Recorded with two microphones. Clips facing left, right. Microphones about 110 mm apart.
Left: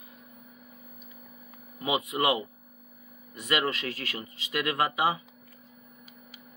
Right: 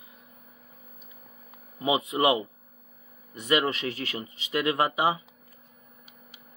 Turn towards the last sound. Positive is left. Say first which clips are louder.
# right 2 dB
turn(degrees=-25)  # may be behind; listen again after turning